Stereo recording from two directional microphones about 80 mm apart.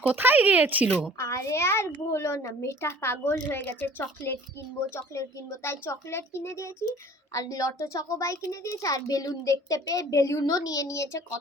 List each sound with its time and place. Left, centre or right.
0.1 s speech: right
1.2 s a child's voice: left
7.3 s a child's voice: left